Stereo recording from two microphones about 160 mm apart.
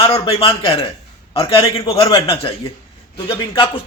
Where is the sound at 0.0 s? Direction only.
35° left (ahead or behind).